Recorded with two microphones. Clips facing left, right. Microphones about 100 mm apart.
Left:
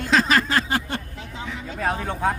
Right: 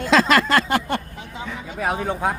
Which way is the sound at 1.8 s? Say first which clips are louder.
Right 2 dB; 10° right (ahead or behind).